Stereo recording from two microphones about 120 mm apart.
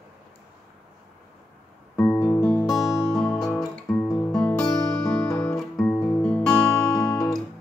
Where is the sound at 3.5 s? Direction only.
10° left (ahead or behind).